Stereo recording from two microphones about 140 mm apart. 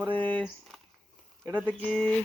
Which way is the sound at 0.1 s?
10° left (ahead or behind).